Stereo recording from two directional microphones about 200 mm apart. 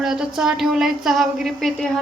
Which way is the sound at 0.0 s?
Centre (ahead or behind).